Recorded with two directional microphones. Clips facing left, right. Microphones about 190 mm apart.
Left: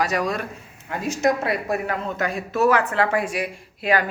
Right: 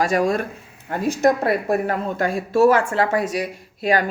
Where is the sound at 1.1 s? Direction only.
55° right (ahead or behind).